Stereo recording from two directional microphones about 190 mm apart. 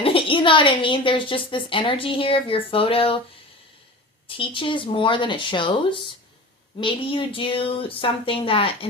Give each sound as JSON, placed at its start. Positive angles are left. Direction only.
{"t": 0.0, "sound": "a woman's voice", "side_deg": 30}
{"t": 4.4, "sound": "a woman's voice", "side_deg": 25}